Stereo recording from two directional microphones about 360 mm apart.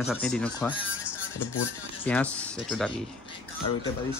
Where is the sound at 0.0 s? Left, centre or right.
Centre.